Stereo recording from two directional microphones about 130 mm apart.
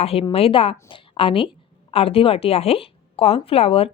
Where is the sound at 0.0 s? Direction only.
50° left (ahead or behind).